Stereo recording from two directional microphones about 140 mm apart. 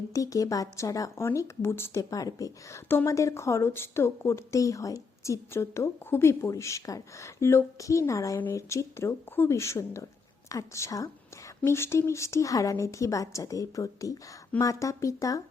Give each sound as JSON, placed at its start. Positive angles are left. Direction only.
{"t": 0.1, "sound": "speech", "side_deg": 25}